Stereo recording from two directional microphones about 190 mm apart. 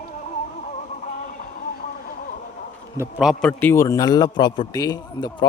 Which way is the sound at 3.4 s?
10° left (ahead or behind).